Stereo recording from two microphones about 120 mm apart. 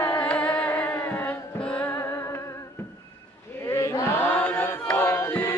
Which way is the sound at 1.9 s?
25° left (ahead or behind).